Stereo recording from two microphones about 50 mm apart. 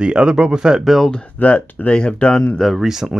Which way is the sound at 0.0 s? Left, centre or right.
Centre.